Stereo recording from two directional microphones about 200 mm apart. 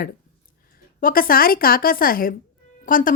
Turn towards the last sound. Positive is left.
turn(degrees=45)  # may be behind; listen again after turning